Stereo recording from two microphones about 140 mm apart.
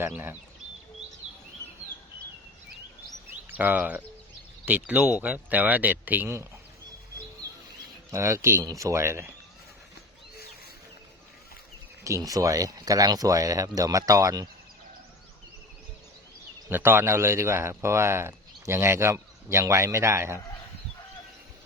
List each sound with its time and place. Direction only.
0.0 s speech: 15° right (ahead or behind)
3.6 s speech: 10° right (ahead or behind)
8.1 s speech: 20° right (ahead or behind)
12.0 s speech: 25° right (ahead or behind)
16.6 s speech: 15° right (ahead or behind)